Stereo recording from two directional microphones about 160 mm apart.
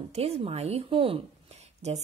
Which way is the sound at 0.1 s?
40° right (ahead or behind).